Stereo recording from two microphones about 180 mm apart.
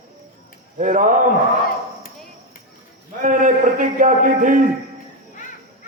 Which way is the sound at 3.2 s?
45° right (ahead or behind).